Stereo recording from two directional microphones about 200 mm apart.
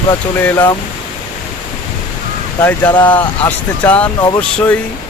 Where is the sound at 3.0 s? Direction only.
10° left (ahead or behind).